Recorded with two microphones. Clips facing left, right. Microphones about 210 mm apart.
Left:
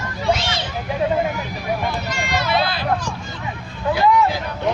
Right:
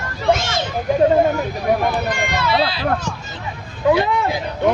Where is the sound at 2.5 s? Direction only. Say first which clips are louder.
Right 2 dB; 50° left (ahead or behind).